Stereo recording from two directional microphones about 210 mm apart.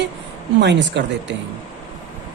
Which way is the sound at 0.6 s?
55° right (ahead or behind).